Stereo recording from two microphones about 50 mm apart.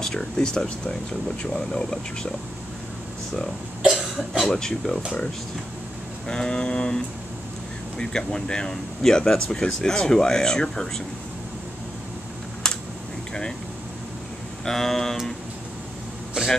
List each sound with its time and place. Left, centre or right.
0.0 s speech: centre
3.8 s cough: centre
4.5 s speech: centre
6.2 s vehicle: centre
8.0 s speech: centre
12.6 s a sound: centre
14.6 s speech: centre